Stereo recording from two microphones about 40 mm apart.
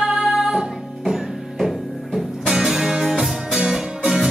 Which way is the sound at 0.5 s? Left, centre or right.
Centre.